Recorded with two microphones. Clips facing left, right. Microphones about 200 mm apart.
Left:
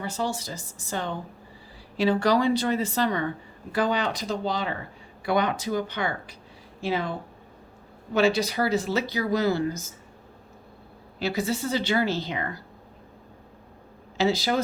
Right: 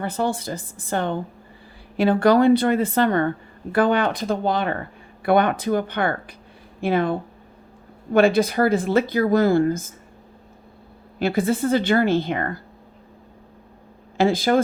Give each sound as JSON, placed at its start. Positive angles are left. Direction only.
{"t": 0.0, "sound": "a woman's voice", "side_deg": -55}
{"t": 11.2, "sound": "speech", "side_deg": -55}
{"t": 14.2, "sound": "speech", "side_deg": -50}